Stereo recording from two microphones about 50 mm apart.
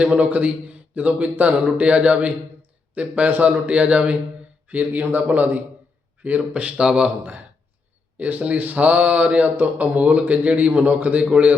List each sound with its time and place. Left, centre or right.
0.1 s a man's voice: right
3.2 s speech: right
3.7 s speech: right
4.7 s speech: right
8.2 s speech: right